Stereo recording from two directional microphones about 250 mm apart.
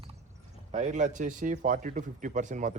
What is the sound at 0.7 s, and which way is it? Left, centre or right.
Speech, right.